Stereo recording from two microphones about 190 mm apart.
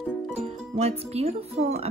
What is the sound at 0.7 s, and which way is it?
Speech, 30° right (ahead or behind).